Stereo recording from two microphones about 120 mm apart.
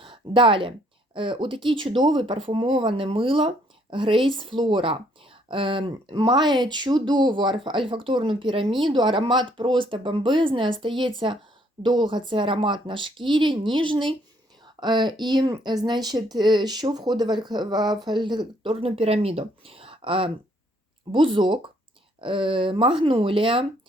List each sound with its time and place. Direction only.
0.0 s speech: 45° right (ahead or behind)